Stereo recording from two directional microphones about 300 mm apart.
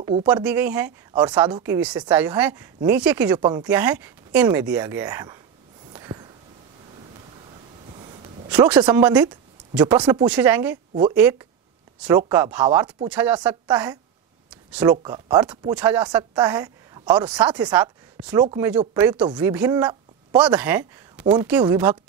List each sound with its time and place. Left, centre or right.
0.0 s speech: centre
5.9 s a sound: centre
8.5 s speech: centre
15.0 s speech: centre